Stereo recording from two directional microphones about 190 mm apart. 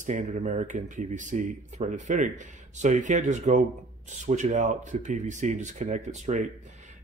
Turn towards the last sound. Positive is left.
turn(degrees=-40)  # may be behind; listen again after turning